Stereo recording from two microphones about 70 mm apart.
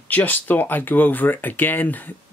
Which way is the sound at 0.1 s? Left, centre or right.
Left.